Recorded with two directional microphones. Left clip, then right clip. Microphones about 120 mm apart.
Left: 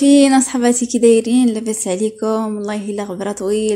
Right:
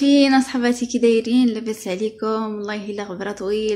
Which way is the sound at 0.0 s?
35° left (ahead or behind).